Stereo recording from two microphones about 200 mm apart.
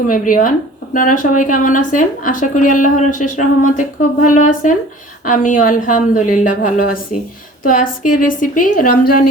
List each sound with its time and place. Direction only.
0.1 s a woman's voice: 40° left (ahead or behind)